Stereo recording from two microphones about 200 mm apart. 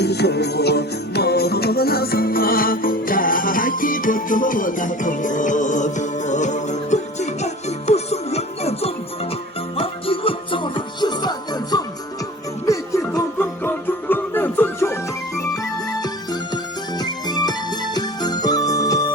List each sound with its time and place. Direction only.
0.0 s music: 55° left (ahead or behind); by 16.4 s 20° left (ahead or behind)
17.0 s jingle bell: 20° left (ahead or behind)